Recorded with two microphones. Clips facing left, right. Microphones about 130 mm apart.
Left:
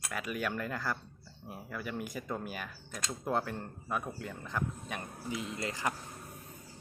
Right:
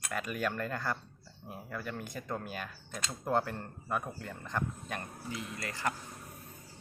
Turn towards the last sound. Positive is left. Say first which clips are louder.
# left 1 dB
turn(degrees=20)  # may be behind; listen again after turning